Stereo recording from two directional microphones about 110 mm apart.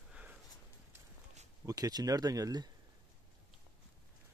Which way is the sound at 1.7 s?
35° right (ahead or behind).